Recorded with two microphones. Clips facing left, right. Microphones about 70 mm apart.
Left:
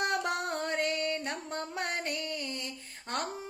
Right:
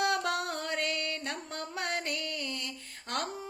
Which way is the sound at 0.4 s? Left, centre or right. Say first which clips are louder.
Left 2 dB; left.